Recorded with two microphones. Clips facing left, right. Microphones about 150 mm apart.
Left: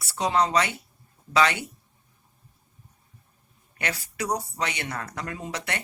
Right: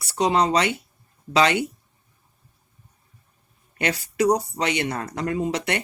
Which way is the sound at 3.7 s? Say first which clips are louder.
Right 8 dB; 20° right (ahead or behind).